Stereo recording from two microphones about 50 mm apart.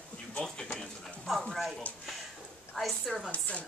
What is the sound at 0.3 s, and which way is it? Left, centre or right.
Speech, centre.